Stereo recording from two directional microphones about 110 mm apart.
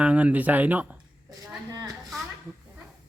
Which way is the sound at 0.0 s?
10° right (ahead or behind).